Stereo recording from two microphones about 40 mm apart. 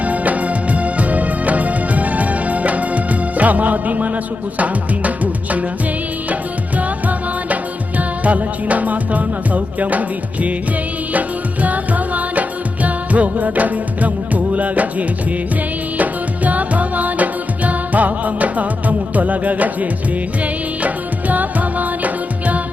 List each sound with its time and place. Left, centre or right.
0.0 s music: right
6.7 s music: right